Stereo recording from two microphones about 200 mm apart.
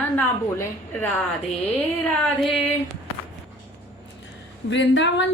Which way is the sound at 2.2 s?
Centre (ahead or behind).